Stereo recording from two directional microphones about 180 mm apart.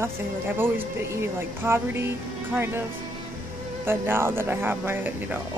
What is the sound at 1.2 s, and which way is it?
Speech, 15° right (ahead or behind).